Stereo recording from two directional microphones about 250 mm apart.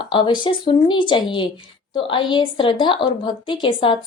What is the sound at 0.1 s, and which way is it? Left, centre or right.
A woman's voice, centre.